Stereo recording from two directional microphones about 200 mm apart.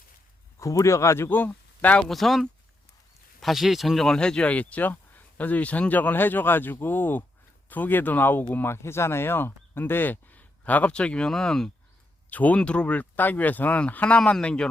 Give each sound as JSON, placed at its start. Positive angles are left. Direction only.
{"t": 0.6, "sound": "speech", "side_deg": 15}